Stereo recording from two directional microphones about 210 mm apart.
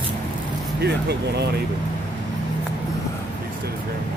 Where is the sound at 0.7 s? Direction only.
50° right (ahead or behind).